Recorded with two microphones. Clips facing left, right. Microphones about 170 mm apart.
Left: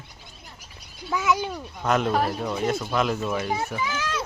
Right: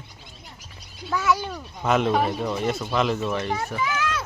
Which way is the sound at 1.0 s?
15° left (ahead or behind).